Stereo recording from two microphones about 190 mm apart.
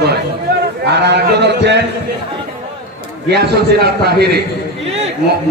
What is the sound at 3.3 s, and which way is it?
A man's voice, 60° right (ahead or behind).